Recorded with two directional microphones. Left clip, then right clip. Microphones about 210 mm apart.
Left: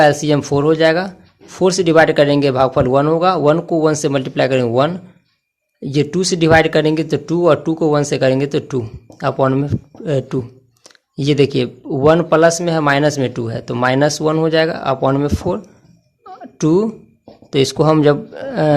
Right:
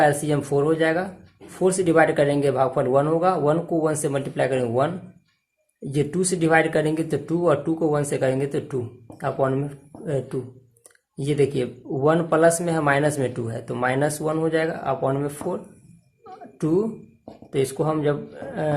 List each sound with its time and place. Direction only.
0.0 s speech: 35° left (ahead or behind)
5.9 s speech: 35° left (ahead or behind)
16.2 s music: 35° left (ahead or behind)
17.5 s speech: 45° left (ahead or behind)